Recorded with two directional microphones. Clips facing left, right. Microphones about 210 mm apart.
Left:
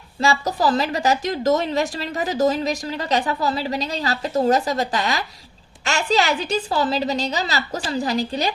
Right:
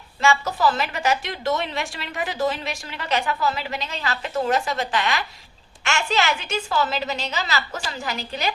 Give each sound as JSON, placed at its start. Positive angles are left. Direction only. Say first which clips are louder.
{"t": 0.2, "sound": "a woman's voice", "louder": "left 1 dB", "side_deg": 35}